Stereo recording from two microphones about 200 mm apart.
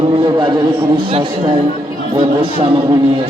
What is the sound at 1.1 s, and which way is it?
Speech, 25° right (ahead or behind).